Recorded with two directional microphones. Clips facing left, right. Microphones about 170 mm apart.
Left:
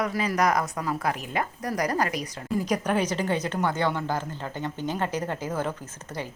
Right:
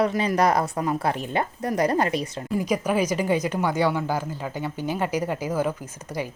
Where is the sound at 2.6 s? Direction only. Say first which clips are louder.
Right 3 dB; 5° right (ahead or behind).